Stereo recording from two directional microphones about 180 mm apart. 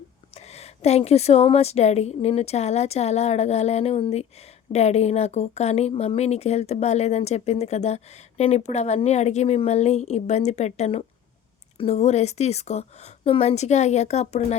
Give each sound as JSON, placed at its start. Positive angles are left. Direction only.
{"t": 0.3, "sound": "speech", "side_deg": 35}